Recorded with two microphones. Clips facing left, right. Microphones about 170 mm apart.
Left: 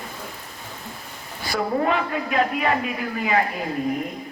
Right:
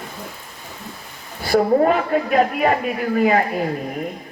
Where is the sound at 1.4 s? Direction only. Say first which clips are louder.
Right 8 dB; 45° right (ahead or behind).